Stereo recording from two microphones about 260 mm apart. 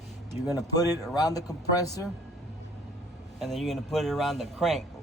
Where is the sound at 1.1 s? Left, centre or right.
Centre.